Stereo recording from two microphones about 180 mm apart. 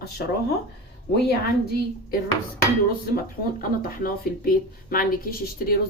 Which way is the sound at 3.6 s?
55° left (ahead or behind).